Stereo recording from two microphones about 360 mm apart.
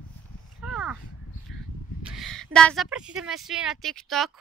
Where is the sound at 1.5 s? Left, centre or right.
Left.